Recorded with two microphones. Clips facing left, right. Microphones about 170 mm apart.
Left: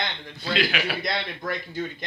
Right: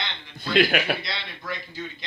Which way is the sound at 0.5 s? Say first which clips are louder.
Right 5 dB; 55° right (ahead or behind).